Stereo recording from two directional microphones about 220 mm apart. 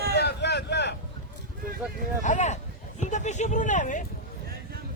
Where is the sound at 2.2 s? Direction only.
30° left (ahead or behind).